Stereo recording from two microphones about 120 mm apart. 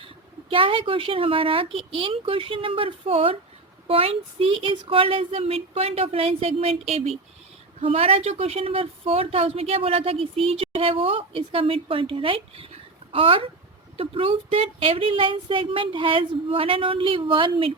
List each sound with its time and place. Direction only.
0.5 s speech: 45° right (ahead or behind)